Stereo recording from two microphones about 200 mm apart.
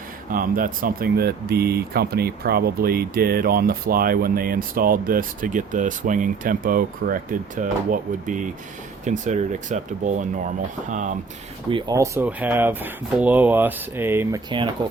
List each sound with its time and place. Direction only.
0.3 s speech: 45° right (ahead or behind)
11.7 s speech: 15° right (ahead or behind)